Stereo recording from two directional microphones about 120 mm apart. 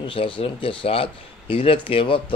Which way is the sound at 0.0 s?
45° left (ahead or behind).